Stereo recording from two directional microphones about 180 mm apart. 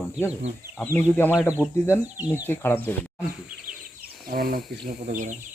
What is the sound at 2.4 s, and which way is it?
Speech, 10° left (ahead or behind).